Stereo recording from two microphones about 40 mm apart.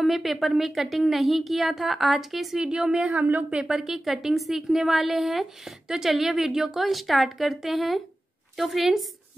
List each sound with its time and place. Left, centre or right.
0.0 s a woman's voice: centre
2.6 s a woman's voice: centre
3.1 s a woman's voice: right
3.4 s a woman's voice: right
3.7 s a woman's voice: centre